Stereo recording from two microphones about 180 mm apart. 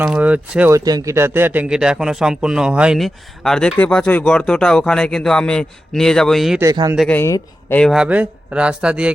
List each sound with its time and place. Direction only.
0.0 s speech: 5° right (ahead or behind)
0.9 s speech: 20° right (ahead or behind); by 6.6 s centre (ahead or behind)
6.6 s speech: 20° right (ahead or behind)
7.1 s speech: 15° left (ahead or behind)
7.8 s speech: centre (ahead or behind)